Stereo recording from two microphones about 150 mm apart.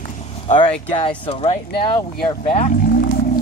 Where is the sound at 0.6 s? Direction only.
35° left (ahead or behind).